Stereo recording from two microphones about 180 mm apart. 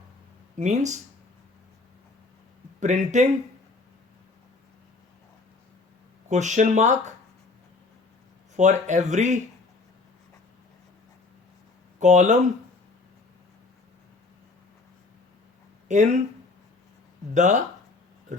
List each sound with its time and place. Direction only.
0.5 s speech: 40° right (ahead or behind)
2.8 s speech: 40° right (ahead or behind)
6.2 s speech: 40° right (ahead or behind)
8.5 s speech: 40° right (ahead or behind)
11.9 s speech: 40° right (ahead or behind)
15.9 s speech: 40° right (ahead or behind)
17.3 s speech: 40° right (ahead or behind)
18.3 s a sound: 40° right (ahead or behind)